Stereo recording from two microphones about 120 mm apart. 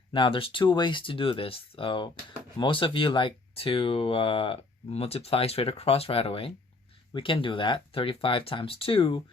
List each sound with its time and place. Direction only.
0.1 s speech: 45° left (ahead or behind)